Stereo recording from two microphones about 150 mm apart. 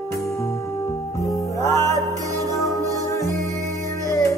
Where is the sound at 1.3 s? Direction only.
20° left (ahead or behind).